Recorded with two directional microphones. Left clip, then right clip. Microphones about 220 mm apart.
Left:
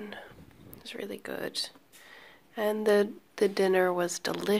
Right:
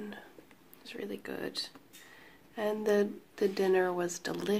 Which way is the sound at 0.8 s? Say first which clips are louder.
Left 2 dB; 20° left (ahead or behind).